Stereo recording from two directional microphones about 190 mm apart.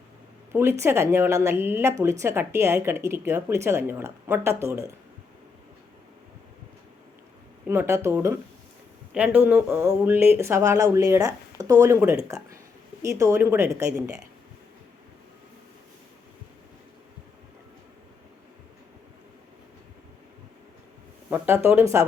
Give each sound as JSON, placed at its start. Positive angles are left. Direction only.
{"t": 0.5, "sound": "a woman's voice", "side_deg": -15}
{"t": 7.7, "sound": "a woman's voice", "side_deg": -15}
{"t": 21.2, "sound": "a woman's voice", "side_deg": -10}